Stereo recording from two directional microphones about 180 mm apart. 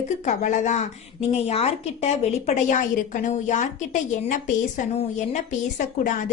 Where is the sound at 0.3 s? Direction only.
45° left (ahead or behind).